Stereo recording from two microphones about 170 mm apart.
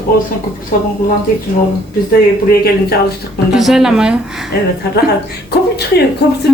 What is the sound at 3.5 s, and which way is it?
Speech, centre (ahead or behind).